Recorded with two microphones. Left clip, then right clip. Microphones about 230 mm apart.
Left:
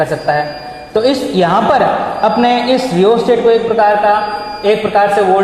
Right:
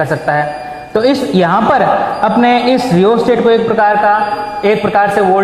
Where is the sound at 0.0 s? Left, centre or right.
Right.